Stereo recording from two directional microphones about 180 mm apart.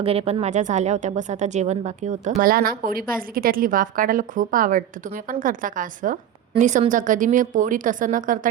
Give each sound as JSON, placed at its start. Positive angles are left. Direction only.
{"t": 0.0, "sound": "speech", "side_deg": -35}